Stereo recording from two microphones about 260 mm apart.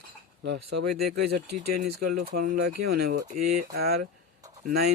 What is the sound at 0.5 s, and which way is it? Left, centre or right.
Speech, right.